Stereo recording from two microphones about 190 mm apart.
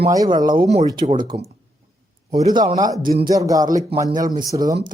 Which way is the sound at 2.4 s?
20° right (ahead or behind).